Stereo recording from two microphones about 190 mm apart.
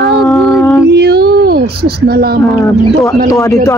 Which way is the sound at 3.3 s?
15° left (ahead or behind).